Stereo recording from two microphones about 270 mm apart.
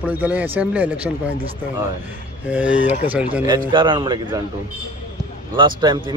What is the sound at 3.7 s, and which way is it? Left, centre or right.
Speech, centre.